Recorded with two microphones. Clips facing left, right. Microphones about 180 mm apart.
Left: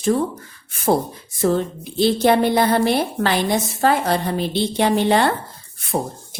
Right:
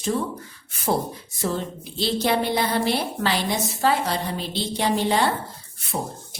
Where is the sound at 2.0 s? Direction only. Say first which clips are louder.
Left 7 dB; 55° left (ahead or behind).